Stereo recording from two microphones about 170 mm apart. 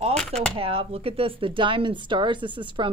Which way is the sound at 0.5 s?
35° right (ahead or behind).